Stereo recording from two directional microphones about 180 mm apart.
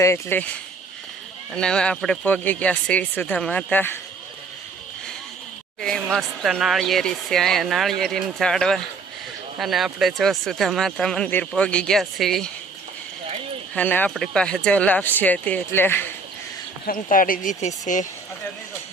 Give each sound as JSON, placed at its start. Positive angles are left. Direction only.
{"t": 0.0, "sound": "speech", "side_deg": 15}
{"t": 1.5, "sound": "speech", "side_deg": 5}
{"t": 6.1, "sound": "speech", "side_deg": 0}
{"t": 13.7, "sound": "speech", "side_deg": 10}
{"t": 16.8, "sound": "speech", "side_deg": 50}